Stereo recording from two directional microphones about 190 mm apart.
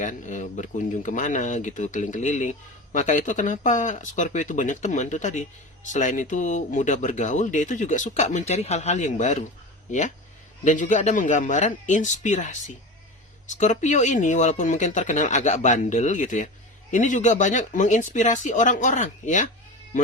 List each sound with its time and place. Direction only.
0.0 s speech: 40° left (ahead or behind)
10.6 s speech: 40° left (ahead or behind)